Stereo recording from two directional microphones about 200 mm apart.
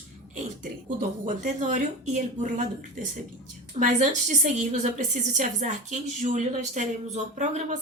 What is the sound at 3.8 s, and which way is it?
A woman's voice, 40° right (ahead or behind).